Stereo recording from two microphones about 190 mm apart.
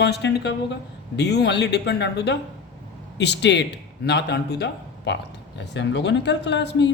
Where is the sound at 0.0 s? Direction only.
60° left (ahead or behind).